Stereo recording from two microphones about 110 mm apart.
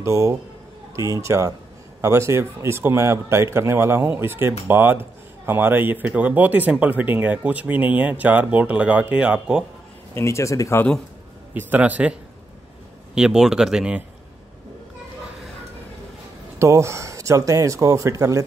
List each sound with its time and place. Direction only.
0.0 s speech: 30° right (ahead or behind); by 9.7 s 10° right (ahead or behind)
10.1 s speech: 25° left (ahead or behind)
11.5 s speech: 15° right (ahead or behind)
16.5 s speech: 25° right (ahead or behind)